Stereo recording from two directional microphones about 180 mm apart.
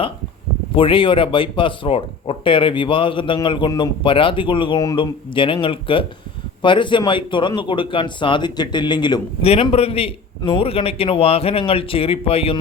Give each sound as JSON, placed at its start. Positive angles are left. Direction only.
{"t": 0.8, "sound": "speech", "side_deg": 30}